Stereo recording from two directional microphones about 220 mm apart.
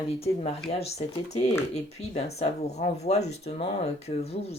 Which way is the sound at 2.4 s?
30° left (ahead or behind).